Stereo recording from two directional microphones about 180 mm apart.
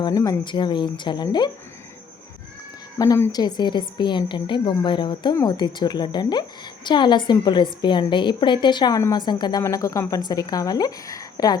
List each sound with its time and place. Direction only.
0.0 s a woman's voice: 20° left (ahead or behind)
3.0 s a woman's voice: 15° left (ahead or behind)